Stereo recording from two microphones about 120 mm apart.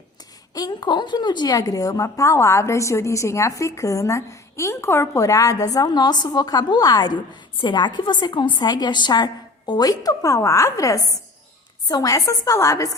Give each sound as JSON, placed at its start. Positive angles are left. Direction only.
{"t": 0.5, "sound": "a woman's voice", "side_deg": 35}